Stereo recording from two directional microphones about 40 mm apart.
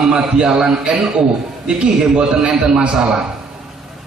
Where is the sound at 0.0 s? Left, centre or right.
Centre.